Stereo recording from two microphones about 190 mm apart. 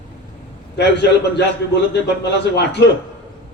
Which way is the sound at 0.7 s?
65° left (ahead or behind).